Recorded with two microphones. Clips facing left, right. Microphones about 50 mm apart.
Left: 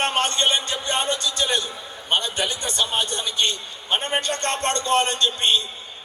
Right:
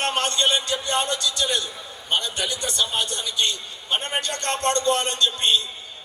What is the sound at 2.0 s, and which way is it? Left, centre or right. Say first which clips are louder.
A man's voice: left 2 dB; left.